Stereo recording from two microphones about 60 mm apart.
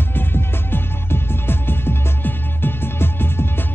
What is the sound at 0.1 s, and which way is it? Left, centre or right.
Music, left.